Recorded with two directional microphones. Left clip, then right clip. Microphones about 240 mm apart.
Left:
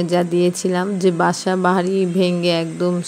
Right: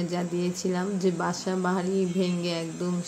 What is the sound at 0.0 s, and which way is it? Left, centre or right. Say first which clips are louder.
A woman's voice: left 13 dB; left.